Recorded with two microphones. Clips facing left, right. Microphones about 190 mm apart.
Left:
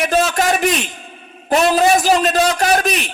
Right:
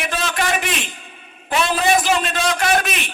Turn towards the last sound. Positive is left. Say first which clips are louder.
# left 3 dB
turn(degrees=40)  # may be behind; listen again after turning